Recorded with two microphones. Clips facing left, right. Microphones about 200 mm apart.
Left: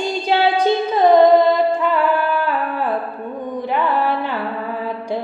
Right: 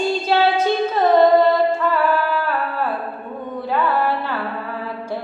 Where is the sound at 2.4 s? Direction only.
15° left (ahead or behind).